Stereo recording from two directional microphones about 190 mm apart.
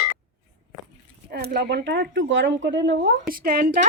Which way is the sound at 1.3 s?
55° right (ahead or behind).